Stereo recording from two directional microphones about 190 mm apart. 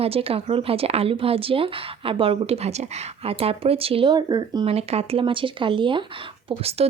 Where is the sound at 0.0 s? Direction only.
30° right (ahead or behind).